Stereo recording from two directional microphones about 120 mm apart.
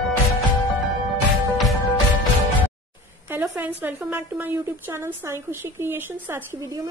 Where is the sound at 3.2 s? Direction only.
20° right (ahead or behind).